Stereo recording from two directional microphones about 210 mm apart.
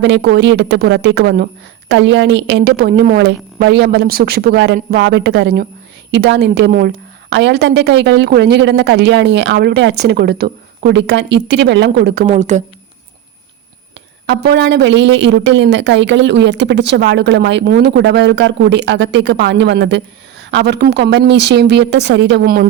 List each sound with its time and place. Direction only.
0.0 s a woman's voice: 55° right (ahead or behind)
12.3 s speech: 35° right (ahead or behind)
14.3 s speech: 50° right (ahead or behind)